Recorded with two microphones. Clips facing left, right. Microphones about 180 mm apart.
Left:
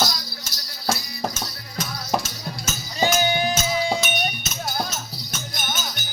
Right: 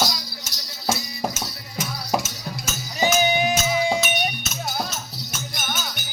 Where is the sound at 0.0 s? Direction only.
10° right (ahead or behind).